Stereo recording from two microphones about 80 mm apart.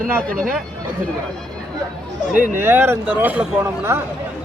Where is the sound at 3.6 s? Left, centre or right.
Right.